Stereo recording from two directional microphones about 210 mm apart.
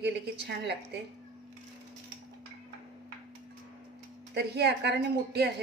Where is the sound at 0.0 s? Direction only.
50° right (ahead or behind).